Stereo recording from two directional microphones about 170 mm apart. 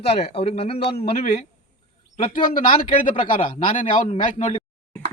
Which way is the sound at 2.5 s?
55° left (ahead or behind).